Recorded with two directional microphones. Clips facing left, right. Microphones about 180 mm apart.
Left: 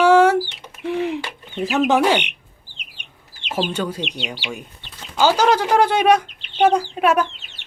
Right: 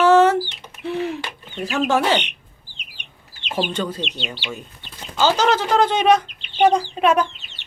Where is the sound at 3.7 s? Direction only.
10° left (ahead or behind).